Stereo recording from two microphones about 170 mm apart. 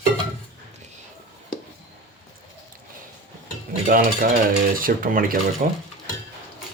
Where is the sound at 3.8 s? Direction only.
55° right (ahead or behind).